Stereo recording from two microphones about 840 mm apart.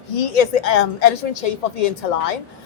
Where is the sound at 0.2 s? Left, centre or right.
Left.